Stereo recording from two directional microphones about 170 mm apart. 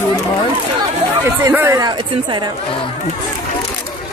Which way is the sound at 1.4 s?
15° right (ahead or behind).